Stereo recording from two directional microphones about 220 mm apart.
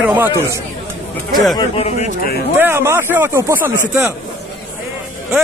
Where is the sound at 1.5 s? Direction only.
25° left (ahead or behind).